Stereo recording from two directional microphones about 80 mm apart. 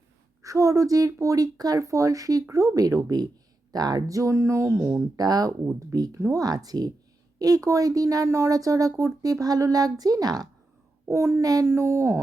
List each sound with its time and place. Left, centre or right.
0.4 s speech: right
5.1 s speech: right
11.1 s speech: right
11.6 s speech: right